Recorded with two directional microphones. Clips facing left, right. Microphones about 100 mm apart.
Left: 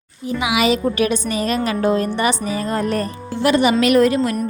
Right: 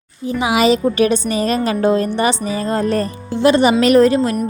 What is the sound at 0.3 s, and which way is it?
A woman's voice, 35° right (ahead or behind).